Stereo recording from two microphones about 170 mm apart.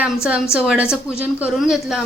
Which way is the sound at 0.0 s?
5° right (ahead or behind).